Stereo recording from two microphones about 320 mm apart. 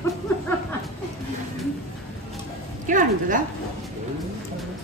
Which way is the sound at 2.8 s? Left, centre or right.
Right.